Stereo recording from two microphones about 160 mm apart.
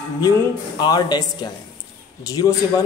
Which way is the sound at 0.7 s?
25° left (ahead or behind).